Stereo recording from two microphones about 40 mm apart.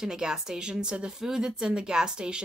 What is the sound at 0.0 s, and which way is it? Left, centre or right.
Speech, centre.